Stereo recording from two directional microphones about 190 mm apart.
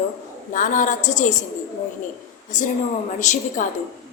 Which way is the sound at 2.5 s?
40° left (ahead or behind).